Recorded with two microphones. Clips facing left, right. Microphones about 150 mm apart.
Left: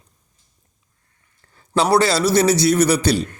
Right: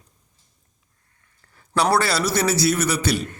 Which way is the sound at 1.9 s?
25° left (ahead or behind).